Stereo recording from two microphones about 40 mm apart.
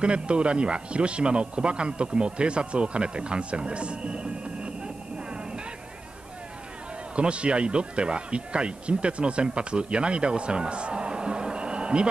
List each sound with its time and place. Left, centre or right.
0.0 s speech: right
7.2 s speech: right